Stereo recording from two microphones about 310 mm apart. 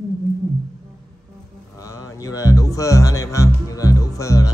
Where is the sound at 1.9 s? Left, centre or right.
Centre.